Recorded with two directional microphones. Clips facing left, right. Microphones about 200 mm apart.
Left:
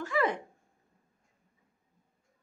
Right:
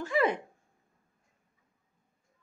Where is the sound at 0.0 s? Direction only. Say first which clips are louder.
Right 2 dB; 20° right (ahead or behind).